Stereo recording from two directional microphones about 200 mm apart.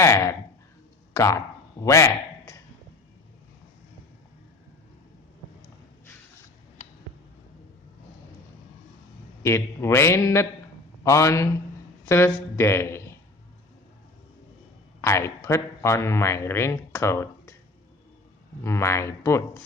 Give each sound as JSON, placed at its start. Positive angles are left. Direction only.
{"t": 0.0, "sound": "speech", "side_deg": 15}
{"t": 1.8, "sound": "a sound", "side_deg": 15}
{"t": 9.4, "sound": "a man's voice", "side_deg": 15}
{"t": 15.0, "sound": "speech", "side_deg": 15}
{"t": 18.6, "sound": "a man's voice", "side_deg": 15}